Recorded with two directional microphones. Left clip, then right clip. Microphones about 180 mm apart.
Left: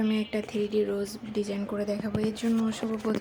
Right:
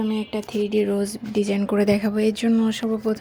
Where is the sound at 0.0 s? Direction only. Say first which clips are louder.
Right 3 dB; 5° right (ahead or behind).